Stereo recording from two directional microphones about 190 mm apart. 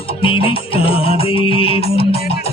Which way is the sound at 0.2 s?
30° left (ahead or behind).